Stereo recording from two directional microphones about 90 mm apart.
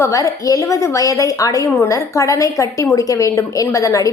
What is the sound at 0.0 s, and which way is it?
A woman's voice, 40° left (ahead or behind).